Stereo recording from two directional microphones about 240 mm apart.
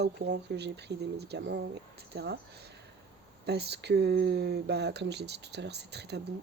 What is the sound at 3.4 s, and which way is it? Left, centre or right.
Speech, right.